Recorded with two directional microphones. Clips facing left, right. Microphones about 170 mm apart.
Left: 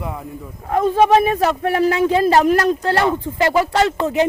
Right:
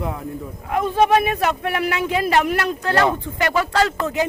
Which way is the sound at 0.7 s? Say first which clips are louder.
Left 3 dB; 35° left (ahead or behind).